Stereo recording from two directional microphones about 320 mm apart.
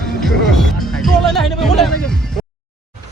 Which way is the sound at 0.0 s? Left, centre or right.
Centre.